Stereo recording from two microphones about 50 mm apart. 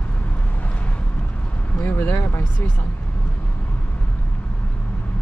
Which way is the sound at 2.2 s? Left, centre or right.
Left.